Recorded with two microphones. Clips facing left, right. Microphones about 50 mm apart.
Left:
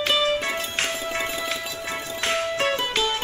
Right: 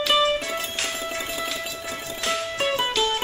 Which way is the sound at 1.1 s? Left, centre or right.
Left.